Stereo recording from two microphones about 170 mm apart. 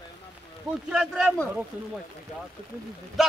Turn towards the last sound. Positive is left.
turn(degrees=0)  # may be behind; listen again after turning